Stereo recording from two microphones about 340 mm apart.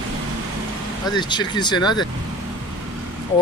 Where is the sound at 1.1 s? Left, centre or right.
Centre.